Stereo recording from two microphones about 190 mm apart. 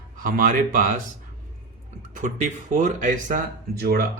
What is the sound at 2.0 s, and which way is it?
A man's voice, 40° right (ahead or behind).